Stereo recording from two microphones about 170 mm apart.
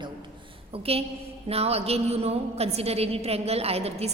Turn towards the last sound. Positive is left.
turn(degrees=-35)  # may be behind; listen again after turning